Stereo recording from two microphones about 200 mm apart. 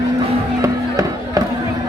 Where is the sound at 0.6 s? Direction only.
20° right (ahead or behind).